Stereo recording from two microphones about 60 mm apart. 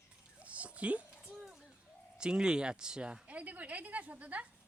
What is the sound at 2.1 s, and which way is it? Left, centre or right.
Speech, centre.